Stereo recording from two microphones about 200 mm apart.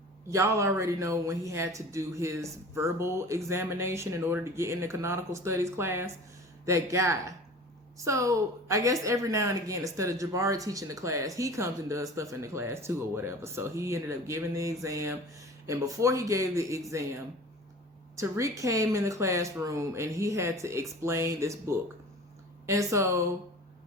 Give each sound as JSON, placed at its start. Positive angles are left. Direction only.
{"t": 0.3, "sound": "speech", "side_deg": -15}
{"t": 18.2, "sound": "speech", "side_deg": -15}